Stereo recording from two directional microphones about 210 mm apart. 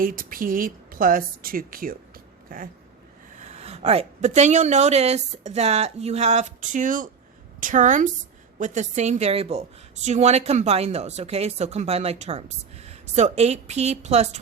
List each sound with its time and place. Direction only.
0.0 s a woman's voice: 40° right (ahead or behind)
3.3 s a woman's voice: 35° right (ahead or behind)